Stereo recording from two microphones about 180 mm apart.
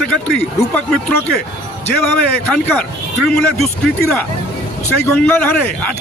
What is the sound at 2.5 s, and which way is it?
Speech, 5° left (ahead or behind).